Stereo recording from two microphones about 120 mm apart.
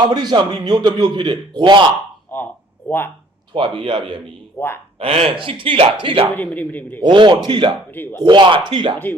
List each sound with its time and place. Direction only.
0.0 s a man's voice: 35° right (ahead or behind)
2.3 s speech: 15° left (ahead or behind)
3.5 s speech: 45° right (ahead or behind)
6.3 s a man's voice: 15° left (ahead or behind)
7.0 s speech: 40° right (ahead or behind)
7.9 s a man's voice: 15° left (ahead or behind)
8.2 s a man's voice: 40° right (ahead or behind)